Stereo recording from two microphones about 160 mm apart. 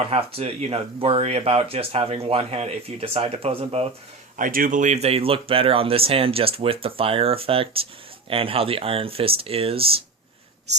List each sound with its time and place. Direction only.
0.0 s speech: 40° right (ahead or behind)
4.4 s speech: 60° right (ahead or behind); by 9.8 s 35° right (ahead or behind)